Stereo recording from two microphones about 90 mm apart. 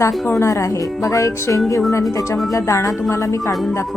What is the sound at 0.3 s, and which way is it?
A woman's voice, 30° left (ahead or behind).